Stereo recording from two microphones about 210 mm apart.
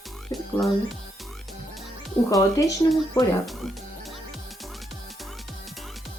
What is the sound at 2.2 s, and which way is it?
Speech, 15° left (ahead or behind).